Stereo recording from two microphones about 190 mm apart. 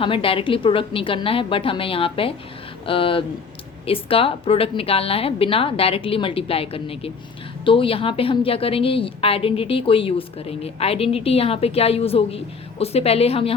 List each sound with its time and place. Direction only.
0.0 s a woman's voice: 30° left (ahead or behind)